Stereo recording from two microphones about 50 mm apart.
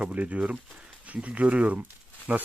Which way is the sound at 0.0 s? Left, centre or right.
Right.